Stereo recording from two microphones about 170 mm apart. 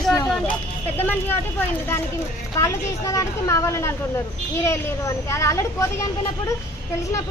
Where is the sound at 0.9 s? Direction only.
10° left (ahead or behind).